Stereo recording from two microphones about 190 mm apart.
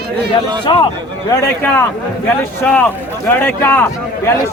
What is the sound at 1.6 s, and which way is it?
Speech, 10° left (ahead or behind).